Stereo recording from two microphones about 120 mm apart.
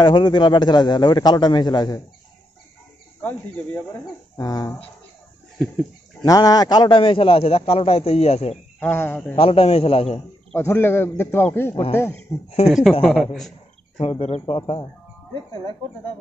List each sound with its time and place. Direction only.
0.0 s a man's voice: 40° left (ahead or behind)
3.2 s a man's voice: 15° left (ahead or behind)
4.4 s a man's voice: 30° left (ahead or behind)
6.2 s a man's voice: 30° left (ahead or behind); by 8.5 s 60° left (ahead or behind)
8.7 s speech: 15° left (ahead or behind)
9.3 s a man's voice: 55° left (ahead or behind)
10.5 s a man's voice: 20° left (ahead or behind)
12.6 s a man's voice: centre (ahead or behind)
14.0 s a man's voice: 60° left (ahead or behind)